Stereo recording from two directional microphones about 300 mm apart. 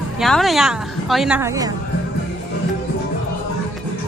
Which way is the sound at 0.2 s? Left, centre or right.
Centre.